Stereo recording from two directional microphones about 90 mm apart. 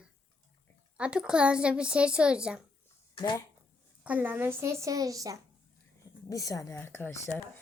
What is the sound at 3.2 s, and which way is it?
Speech, 75° left (ahead or behind).